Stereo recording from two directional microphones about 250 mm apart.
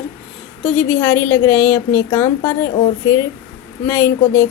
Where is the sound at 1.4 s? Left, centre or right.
Centre.